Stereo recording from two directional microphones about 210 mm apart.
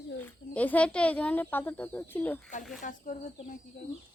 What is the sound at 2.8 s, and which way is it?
Speech, 40° left (ahead or behind).